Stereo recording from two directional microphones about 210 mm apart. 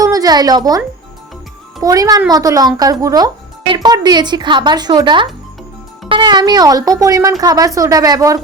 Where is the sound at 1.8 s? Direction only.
15° right (ahead or behind).